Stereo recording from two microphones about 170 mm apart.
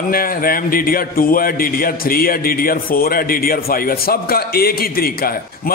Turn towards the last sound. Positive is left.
turn(degrees=60)  # may be behind; listen again after turning